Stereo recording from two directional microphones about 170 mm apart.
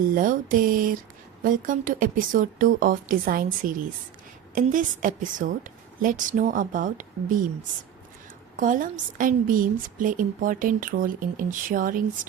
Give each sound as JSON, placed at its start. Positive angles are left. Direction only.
{"t": 0.0, "sound": "a sound", "side_deg": -55}
{"t": 1.5, "sound": "speech", "side_deg": -50}
{"t": 8.5, "sound": "speech", "side_deg": -50}